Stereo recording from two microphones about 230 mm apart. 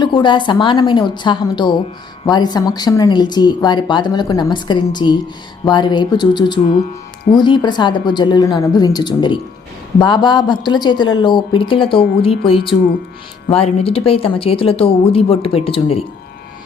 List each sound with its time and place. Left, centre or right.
0.0 s a woman's voice: centre